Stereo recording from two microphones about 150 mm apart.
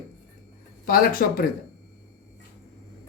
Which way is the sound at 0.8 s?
75° left (ahead or behind).